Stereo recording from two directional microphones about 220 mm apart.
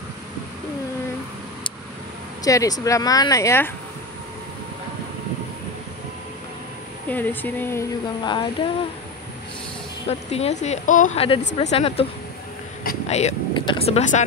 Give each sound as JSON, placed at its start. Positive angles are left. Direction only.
{"t": 2.4, "sound": "a woman's voice", "side_deg": 15}
{"t": 7.1, "sound": "a woman's voice", "side_deg": 10}
{"t": 10.0, "sound": "a woman's voice", "side_deg": 30}